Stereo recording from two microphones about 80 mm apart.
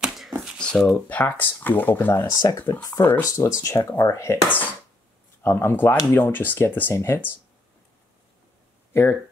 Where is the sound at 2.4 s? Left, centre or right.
Left.